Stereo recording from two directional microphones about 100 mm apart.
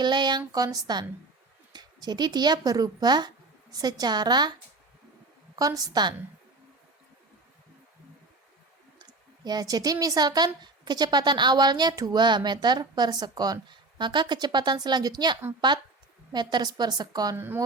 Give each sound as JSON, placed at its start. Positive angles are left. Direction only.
{"t": 0.0, "sound": "a woman's voice", "side_deg": -45}
{"t": 5.5, "sound": "a woman's voice", "side_deg": -35}
{"t": 9.0, "sound": "a woman's voice", "side_deg": -45}
{"t": 17.3, "sound": "speech", "side_deg": -20}